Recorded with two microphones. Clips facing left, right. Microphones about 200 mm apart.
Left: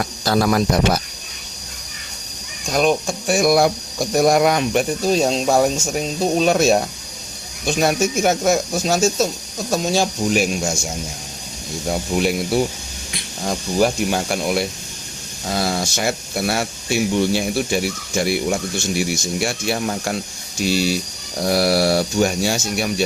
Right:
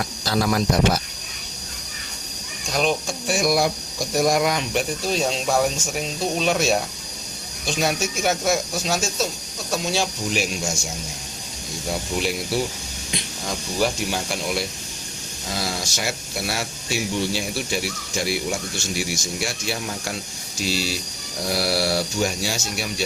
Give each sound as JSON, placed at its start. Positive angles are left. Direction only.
{"t": 0.3, "sound": "speech", "side_deg": 60}
{"t": 2.7, "sound": "speech", "side_deg": 50}
{"t": 7.8, "sound": "speech", "side_deg": 50}
{"t": 11.9, "sound": "speech", "side_deg": 55}
{"t": 13.7, "sound": "speech", "side_deg": 50}
{"t": 18.9, "sound": "speech", "side_deg": 55}